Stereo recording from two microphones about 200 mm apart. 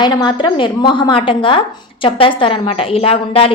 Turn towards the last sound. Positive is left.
turn(degrees=30)  # may be behind; listen again after turning